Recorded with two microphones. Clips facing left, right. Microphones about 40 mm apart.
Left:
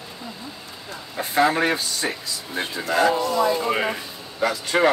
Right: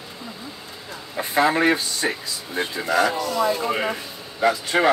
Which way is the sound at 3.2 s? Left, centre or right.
Centre.